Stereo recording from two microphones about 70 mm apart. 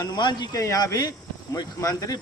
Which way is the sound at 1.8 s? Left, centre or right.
Left.